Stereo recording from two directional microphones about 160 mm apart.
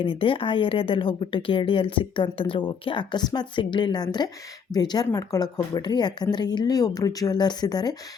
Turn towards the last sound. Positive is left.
turn(degrees=25)  # may be behind; listen again after turning